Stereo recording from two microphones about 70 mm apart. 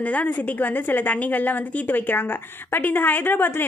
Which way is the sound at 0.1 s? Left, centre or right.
Left.